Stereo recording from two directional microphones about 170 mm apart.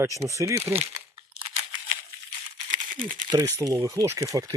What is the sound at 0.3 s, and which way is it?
Speech, 15° right (ahead or behind).